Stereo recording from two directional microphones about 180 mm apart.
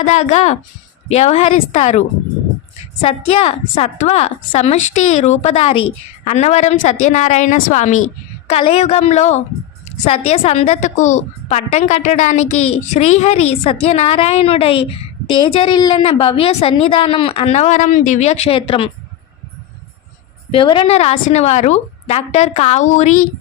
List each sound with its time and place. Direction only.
0.0 s a woman's voice: 40° left (ahead or behind)
20.5 s a woman's voice: 30° left (ahead or behind)